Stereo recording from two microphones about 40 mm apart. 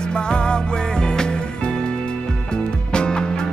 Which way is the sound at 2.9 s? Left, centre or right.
Left.